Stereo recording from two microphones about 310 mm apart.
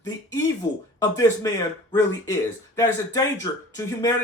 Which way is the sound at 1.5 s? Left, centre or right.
Centre.